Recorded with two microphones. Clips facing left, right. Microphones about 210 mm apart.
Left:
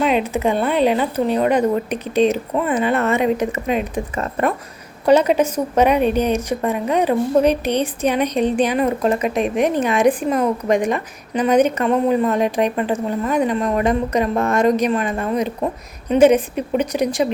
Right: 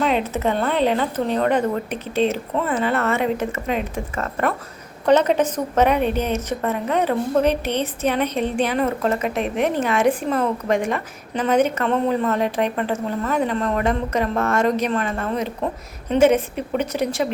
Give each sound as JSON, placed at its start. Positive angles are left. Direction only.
{"t": 0.0, "sound": "a woman's voice", "side_deg": 15}